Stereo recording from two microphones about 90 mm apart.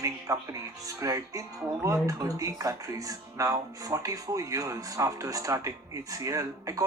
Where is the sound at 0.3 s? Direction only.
35° right (ahead or behind).